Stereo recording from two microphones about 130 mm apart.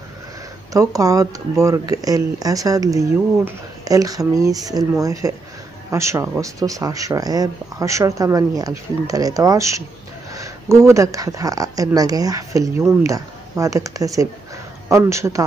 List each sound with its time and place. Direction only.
0.7 s speech: 25° right (ahead or behind)